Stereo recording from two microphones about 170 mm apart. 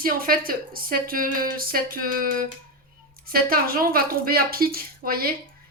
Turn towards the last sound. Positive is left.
turn(degrees=-60)  # may be behind; listen again after turning